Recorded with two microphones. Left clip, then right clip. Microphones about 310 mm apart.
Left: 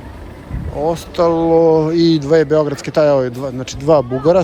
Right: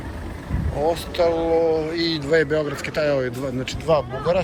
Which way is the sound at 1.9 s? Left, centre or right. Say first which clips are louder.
Left 8 dB; centre.